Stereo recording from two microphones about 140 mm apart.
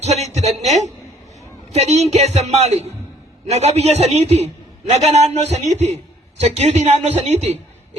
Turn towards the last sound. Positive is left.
turn(degrees=-50)  # may be behind; listen again after turning